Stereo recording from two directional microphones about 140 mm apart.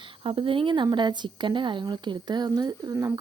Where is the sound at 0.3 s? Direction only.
40° right (ahead or behind).